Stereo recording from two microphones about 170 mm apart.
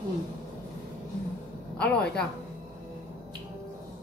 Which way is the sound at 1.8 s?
5° left (ahead or behind).